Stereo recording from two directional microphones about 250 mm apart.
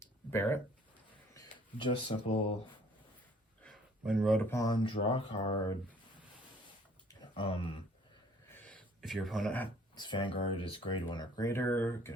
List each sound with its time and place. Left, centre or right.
0.0 s a sound: centre
1.8 s speech: left
3.6 s speech: centre
7.3 s speech: centre
8.5 s a sound: centre
9.9 s speech: centre